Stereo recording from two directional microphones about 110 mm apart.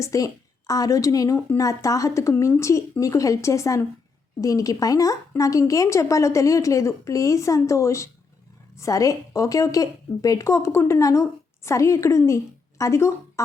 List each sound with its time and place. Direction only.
0.0 s a woman's voice: 30° left (ahead or behind)